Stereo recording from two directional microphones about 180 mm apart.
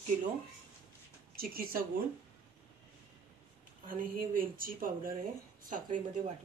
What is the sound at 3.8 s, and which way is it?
Speech, 50° right (ahead or behind).